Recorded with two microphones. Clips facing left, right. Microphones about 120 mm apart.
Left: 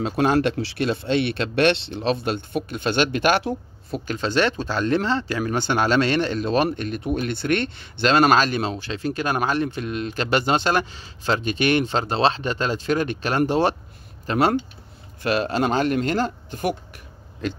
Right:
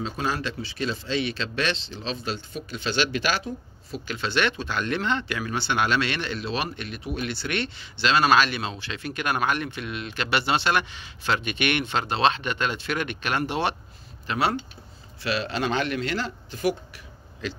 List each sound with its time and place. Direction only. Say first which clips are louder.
0.0 s speech: left 9 dB; 60° left (ahead or behind)
3.9 s speech: left 5 dB; 40° left (ahead or behind)